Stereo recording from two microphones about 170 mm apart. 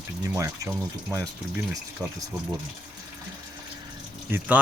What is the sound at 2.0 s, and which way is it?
Speech, 5° right (ahead or behind).